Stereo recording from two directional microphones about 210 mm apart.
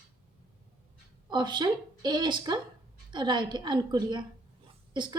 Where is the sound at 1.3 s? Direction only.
20° right (ahead or behind).